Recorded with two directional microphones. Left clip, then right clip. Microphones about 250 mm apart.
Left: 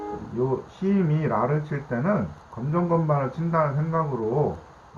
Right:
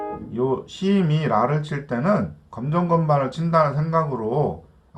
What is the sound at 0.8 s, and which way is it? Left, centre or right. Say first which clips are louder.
Speech: right 3 dB; centre.